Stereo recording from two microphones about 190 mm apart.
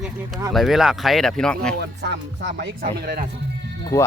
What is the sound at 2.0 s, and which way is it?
Speech, 65° right (ahead or behind).